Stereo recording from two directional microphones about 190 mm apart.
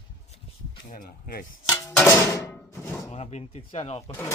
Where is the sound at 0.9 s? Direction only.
50° left (ahead or behind).